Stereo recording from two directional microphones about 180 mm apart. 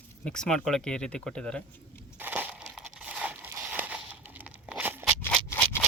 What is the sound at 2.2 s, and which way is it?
Crumpling, 10° right (ahead or behind).